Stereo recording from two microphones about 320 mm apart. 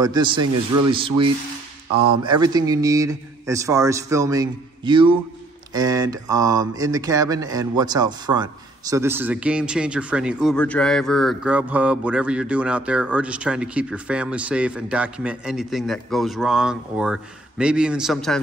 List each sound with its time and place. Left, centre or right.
0.0 s a man's voice: centre
0.4 s speech: right
0.9 s a man's voice: centre